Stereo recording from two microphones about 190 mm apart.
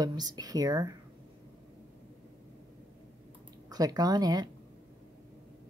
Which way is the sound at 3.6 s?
20° right (ahead or behind).